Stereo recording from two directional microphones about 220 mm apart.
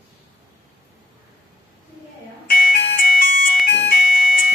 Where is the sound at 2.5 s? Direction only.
40° left (ahead or behind).